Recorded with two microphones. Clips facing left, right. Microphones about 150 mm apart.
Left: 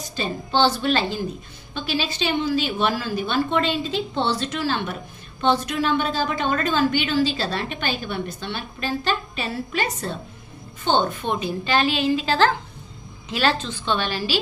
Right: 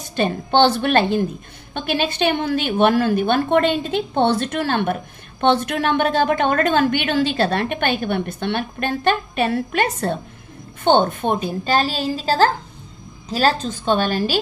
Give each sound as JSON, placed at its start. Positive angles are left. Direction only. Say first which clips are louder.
{"t": 0.0, "sound": "a woman's voice", "louder": "right 7 dB", "side_deg": -60}